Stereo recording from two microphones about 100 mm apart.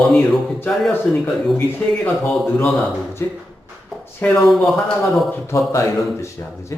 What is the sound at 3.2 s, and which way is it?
Speech, 30° left (ahead or behind).